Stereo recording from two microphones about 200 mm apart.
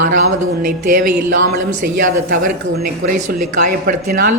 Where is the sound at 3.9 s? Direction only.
45° right (ahead or behind).